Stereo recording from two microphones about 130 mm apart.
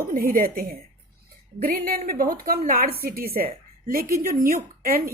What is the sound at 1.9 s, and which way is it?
A woman's voice, 90° right.